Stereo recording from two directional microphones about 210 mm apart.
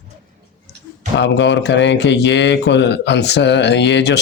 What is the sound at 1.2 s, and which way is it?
Speech, 60° left (ahead or behind).